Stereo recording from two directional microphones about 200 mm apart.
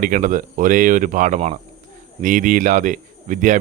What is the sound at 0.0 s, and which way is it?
Speech, 40° right (ahead or behind).